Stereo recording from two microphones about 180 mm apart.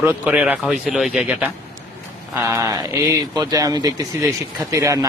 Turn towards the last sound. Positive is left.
turn(degrees=-15)  # may be behind; listen again after turning